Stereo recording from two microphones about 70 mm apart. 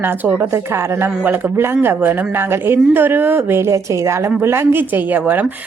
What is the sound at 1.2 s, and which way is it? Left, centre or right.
Speech, right.